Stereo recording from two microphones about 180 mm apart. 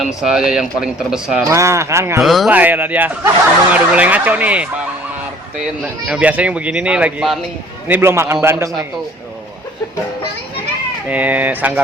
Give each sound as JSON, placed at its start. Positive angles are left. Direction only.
{"t": 0.0, "sound": "speech", "side_deg": -5}
{"t": 1.5, "sound": "speech", "side_deg": -15}
{"t": 2.2, "sound": "speech", "side_deg": 0}
{"t": 6.1, "sound": "speech", "side_deg": -5}
{"t": 11.1, "sound": "speech", "side_deg": -10}